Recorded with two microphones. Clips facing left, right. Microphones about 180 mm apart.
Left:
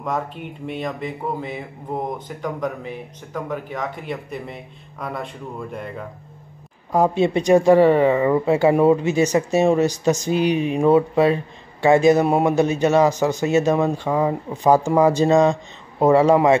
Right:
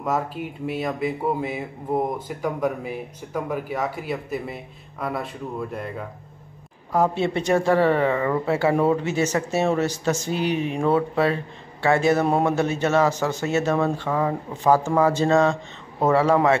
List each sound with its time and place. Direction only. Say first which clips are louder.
0.0 s a man's voice: right 1 dB; 5° right (ahead or behind)
6.9 s speech: left 4 dB; 15° left (ahead or behind)